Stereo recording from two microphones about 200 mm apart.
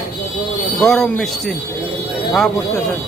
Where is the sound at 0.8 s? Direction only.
Centre (ahead or behind).